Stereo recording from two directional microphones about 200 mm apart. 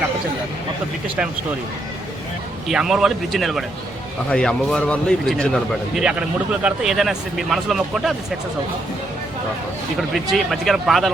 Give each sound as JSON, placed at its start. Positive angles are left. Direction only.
{"t": 2.6, "sound": "speech", "side_deg": -5}
{"t": 10.3, "sound": "speech", "side_deg": 0}